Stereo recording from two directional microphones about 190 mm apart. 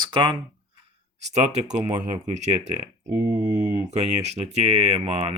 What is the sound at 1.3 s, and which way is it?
Speech, 35° right (ahead or behind).